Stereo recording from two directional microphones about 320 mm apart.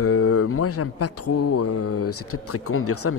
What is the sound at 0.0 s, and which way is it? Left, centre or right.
Speech, left.